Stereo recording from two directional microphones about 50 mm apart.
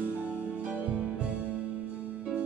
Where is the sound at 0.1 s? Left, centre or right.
Right.